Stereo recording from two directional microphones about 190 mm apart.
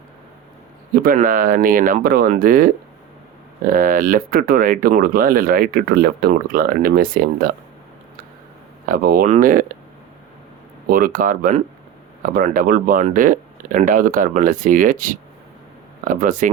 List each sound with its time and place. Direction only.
1.0 s speech: 45° right (ahead or behind)
3.7 s speech: 45° right (ahead or behind)
8.9 s speech: 45° right (ahead or behind)
10.8 s speech: 45° right (ahead or behind)